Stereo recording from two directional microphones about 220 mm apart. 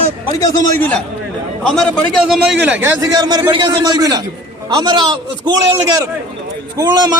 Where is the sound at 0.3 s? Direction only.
15° left (ahead or behind).